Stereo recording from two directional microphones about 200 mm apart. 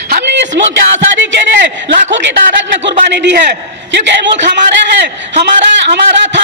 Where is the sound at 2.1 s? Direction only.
65° right (ahead or behind).